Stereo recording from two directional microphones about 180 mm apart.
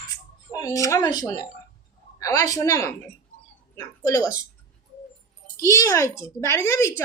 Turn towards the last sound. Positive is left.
turn(degrees=15)  # may be behind; listen again after turning